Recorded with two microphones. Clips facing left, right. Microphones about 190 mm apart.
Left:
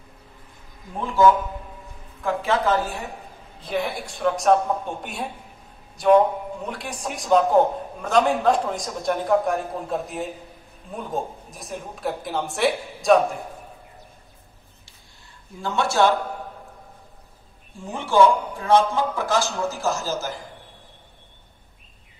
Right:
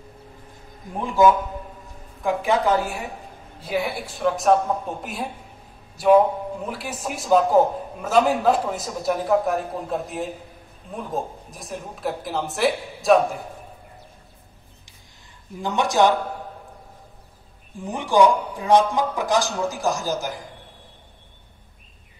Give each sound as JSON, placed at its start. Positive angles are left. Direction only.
{"t": 0.9, "sound": "a man's voice", "side_deg": -15}
{"t": 15.6, "sound": "a man's voice", "side_deg": -15}
{"t": 17.7, "sound": "a man's voice", "side_deg": -15}